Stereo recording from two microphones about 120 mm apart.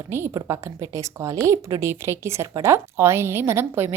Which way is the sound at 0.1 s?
25° right (ahead or behind).